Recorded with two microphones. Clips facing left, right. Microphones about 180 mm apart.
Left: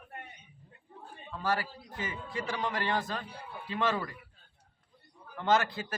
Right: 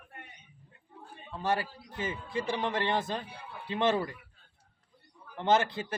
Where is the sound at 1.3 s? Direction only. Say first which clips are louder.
Right 1 dB; 25° right (ahead or behind).